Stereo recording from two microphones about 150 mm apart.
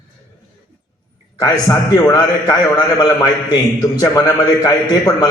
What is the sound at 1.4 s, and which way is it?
A man's voice, 20° left (ahead or behind).